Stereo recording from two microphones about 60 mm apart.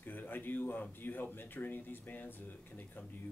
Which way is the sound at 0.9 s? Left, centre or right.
Left.